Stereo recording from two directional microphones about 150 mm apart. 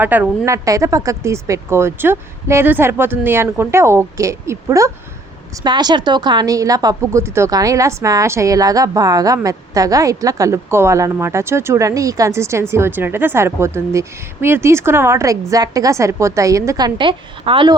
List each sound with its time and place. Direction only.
0.0 s a woman's voice: 10° right (ahead or behind); by 17.7 s 35° right (ahead or behind)